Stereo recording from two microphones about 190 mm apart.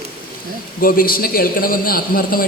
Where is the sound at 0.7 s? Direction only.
50° left (ahead or behind).